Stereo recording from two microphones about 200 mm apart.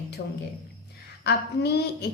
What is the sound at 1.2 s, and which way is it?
Speech, 55° left (ahead or behind).